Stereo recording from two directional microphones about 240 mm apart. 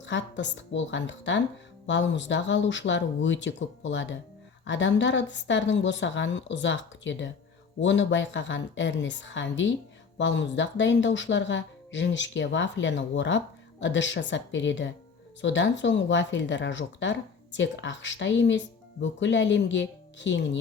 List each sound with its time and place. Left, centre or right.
0.0 s speech: left